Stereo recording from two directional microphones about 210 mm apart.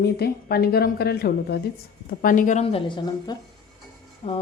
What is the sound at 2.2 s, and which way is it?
A woman's voice, 40° left (ahead or behind).